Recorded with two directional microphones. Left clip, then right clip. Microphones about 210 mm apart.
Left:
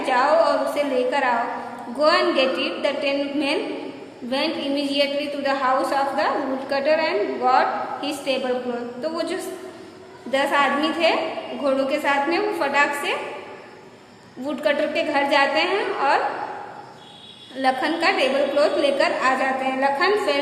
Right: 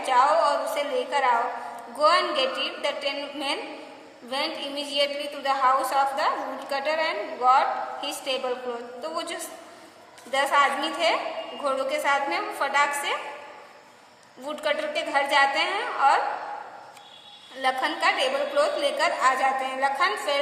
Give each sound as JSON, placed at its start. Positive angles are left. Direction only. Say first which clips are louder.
{"t": 0.0, "sound": "a sound", "louder": "left 2 dB", "side_deg": -30}
{"t": 2.0, "sound": "a woman's voice", "louder": "left 3 dB", "side_deg": -30}
{"t": 14.4, "sound": "a woman's voice", "louder": "left 5 dB", "side_deg": -30}
{"t": 17.6, "sound": "a woman's voice", "louder": "left 4 dB", "side_deg": -30}